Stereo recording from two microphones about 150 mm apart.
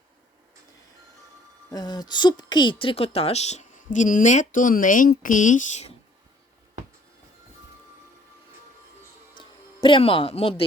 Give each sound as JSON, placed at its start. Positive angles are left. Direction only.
{"t": 1.7, "sound": "a woman's voice", "side_deg": 25}
{"t": 9.4, "sound": "speech", "side_deg": 35}